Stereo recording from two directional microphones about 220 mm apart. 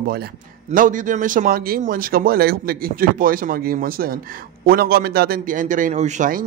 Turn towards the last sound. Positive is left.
turn(degrees=-35)  # may be behind; listen again after turning